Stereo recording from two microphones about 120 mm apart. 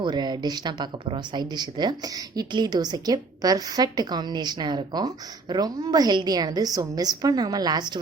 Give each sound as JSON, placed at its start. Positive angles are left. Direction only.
{"t": 0.0, "sound": "speech", "side_deg": -35}